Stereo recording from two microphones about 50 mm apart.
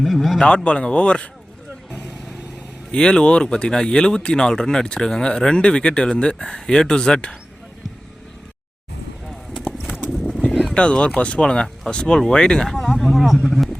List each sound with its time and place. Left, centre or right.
0.0 s speech: centre
0.3 s speech: left
2.9 s speech: centre
10.1 s clip-clop: centre
11.2 s speech: left
12.6 s speech: centre